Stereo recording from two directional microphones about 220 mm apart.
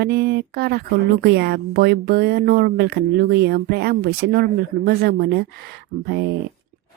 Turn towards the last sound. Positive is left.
turn(degrees=-50)  # may be behind; listen again after turning